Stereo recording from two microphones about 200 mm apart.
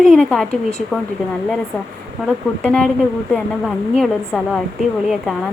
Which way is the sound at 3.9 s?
Centre (ahead or behind).